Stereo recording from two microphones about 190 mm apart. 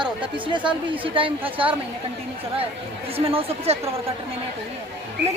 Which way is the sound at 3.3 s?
30° right (ahead or behind).